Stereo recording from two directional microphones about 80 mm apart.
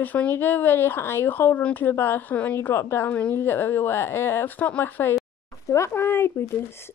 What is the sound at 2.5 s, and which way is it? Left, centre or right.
Speech, left.